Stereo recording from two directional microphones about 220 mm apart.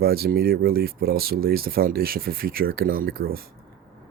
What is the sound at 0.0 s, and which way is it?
Speech, 45° right (ahead or behind).